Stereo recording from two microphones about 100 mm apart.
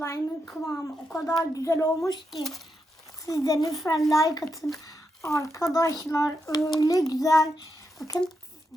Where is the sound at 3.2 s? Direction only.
35° left (ahead or behind).